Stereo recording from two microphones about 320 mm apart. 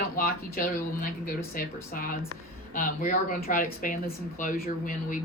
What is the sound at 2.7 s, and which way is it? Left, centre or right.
Speech, left.